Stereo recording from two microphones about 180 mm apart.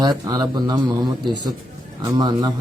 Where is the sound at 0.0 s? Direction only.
20° right (ahead or behind).